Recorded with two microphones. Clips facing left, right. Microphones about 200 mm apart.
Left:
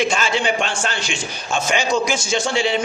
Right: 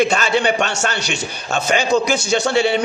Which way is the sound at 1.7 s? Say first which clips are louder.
Right 4 dB; 55° right (ahead or behind).